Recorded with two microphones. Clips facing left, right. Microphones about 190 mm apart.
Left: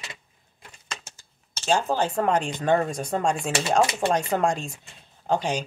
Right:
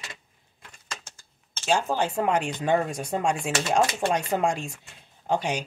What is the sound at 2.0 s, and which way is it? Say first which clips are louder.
Speech: left 1 dB; 10° right (ahead or behind).